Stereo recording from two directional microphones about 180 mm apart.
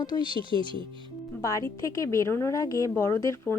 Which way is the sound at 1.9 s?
15° left (ahead or behind).